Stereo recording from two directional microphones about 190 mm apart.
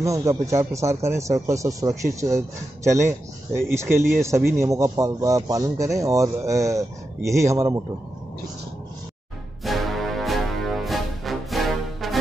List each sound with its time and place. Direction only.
0.0 s speech: 15° right (ahead or behind)
9.7 s music: centre (ahead or behind)